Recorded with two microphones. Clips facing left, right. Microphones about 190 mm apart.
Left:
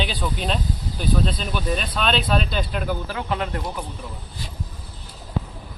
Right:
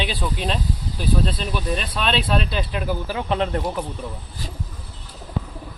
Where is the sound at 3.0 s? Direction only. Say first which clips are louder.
Right 3 dB; 25° right (ahead or behind).